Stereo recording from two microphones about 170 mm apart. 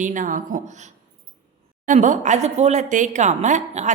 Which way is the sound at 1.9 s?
45° right (ahead or behind).